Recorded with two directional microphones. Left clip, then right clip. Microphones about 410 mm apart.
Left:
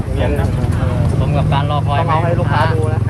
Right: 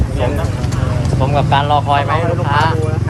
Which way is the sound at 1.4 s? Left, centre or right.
Centre.